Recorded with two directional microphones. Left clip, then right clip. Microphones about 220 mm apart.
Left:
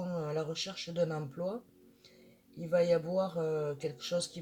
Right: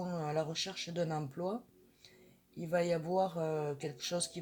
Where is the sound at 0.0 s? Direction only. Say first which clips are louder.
Even; 40° right (ahead or behind).